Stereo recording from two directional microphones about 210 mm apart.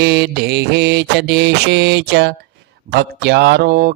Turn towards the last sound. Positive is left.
turn(degrees=-50)  # may be behind; listen again after turning